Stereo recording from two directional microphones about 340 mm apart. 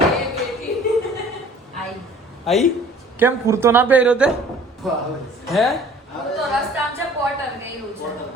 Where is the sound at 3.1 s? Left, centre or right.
Centre.